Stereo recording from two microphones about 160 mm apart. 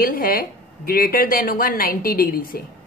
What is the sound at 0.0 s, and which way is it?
A woman's voice, 65° left (ahead or behind).